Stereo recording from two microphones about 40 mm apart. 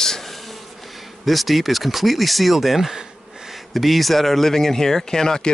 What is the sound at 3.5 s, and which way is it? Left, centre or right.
Speech, centre.